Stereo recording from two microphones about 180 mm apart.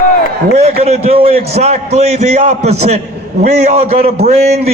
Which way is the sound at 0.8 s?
35° right (ahead or behind).